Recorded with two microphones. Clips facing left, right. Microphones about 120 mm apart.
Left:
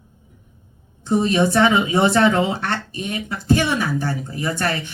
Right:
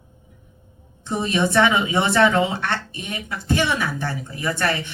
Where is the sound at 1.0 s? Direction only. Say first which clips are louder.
Left 4 dB; 30° left (ahead or behind).